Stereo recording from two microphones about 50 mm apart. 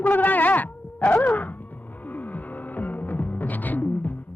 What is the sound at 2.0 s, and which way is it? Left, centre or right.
Music, left.